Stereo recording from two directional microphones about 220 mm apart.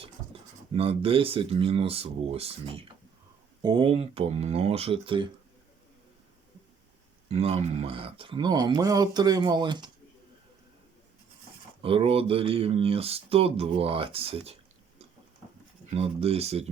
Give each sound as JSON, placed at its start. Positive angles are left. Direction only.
{"t": 0.8, "sound": "speech", "side_deg": -25}
{"t": 7.3, "sound": "speech", "side_deg": -25}
{"t": 11.8, "sound": "speech", "side_deg": -25}